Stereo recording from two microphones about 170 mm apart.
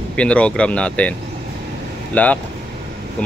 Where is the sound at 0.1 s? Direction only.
5° left (ahead or behind).